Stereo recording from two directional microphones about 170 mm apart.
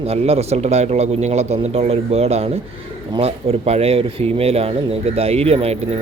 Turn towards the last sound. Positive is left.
turn(degrees=-35)  # may be behind; listen again after turning